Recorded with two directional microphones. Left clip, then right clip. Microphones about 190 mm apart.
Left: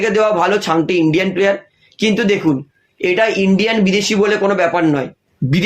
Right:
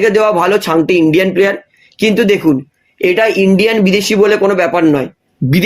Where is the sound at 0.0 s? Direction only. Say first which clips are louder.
Right 4 dB; 45° right (ahead or behind).